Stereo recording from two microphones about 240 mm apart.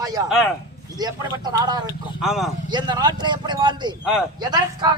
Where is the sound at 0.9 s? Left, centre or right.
Centre.